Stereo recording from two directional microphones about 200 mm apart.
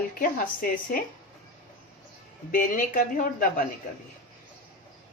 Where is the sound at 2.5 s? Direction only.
45° left (ahead or behind).